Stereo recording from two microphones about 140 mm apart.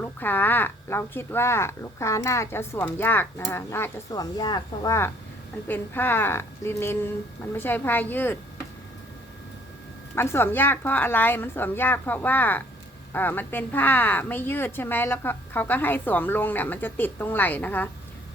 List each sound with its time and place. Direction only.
0.0 s speech: 15° left (ahead or behind); by 4.9 s 30° left (ahead or behind)
5.6 s speech: 15° left (ahead or behind)
10.2 s speech: 15° left (ahead or behind)